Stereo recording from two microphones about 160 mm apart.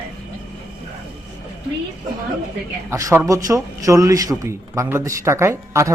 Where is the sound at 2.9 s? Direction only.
20° right (ahead or behind).